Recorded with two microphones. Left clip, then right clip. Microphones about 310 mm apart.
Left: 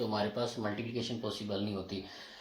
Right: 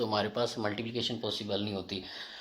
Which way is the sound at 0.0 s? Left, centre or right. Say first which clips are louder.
Right 3 dB; centre.